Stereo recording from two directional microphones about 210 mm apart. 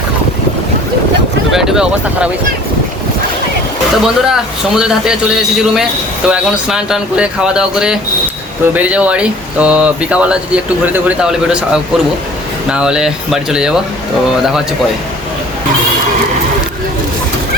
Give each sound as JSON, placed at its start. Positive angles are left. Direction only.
{"t": 1.5, "sound": "speech", "side_deg": 0}
{"t": 4.0, "sound": "speech", "side_deg": -5}